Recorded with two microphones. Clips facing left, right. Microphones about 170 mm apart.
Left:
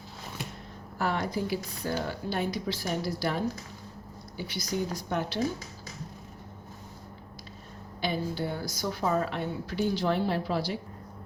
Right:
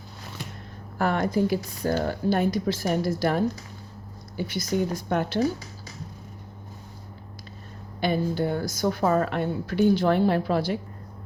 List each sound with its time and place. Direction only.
0.9 s a woman's voice: 55° right (ahead or behind)
8.0 s a woman's voice: 50° right (ahead or behind)